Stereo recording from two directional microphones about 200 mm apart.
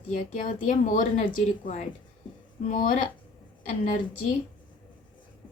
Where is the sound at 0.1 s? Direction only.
40° left (ahead or behind).